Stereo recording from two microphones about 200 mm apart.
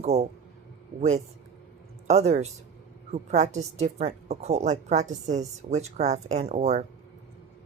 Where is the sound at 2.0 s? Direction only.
35° right (ahead or behind).